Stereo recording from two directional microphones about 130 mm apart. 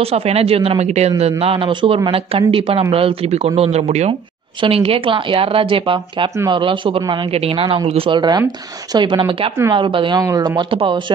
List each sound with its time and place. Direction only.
0.0 s speech: 50° right (ahead or behind)
4.6 s speech: 45° right (ahead or behind)